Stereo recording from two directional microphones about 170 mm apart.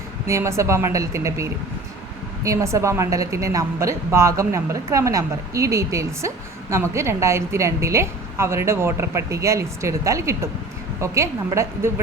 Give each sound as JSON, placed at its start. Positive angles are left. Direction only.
{"t": 0.3, "sound": "a woman's voice", "side_deg": -15}